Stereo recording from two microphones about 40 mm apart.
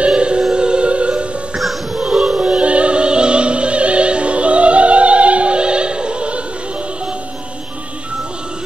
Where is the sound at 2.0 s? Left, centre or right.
Right.